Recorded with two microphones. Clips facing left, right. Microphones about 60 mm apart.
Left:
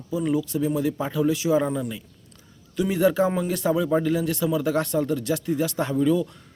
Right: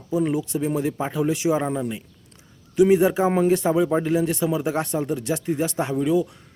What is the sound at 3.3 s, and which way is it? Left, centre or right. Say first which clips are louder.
Speech: right 4 dB; right.